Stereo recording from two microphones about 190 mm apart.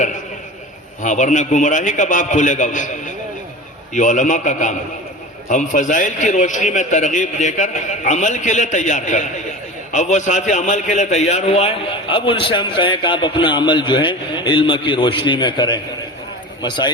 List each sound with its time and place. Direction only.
1.0 s a man's voice: 40° left (ahead or behind)
3.9 s a man's voice: 40° left (ahead or behind); by 16.9 s 25° left (ahead or behind)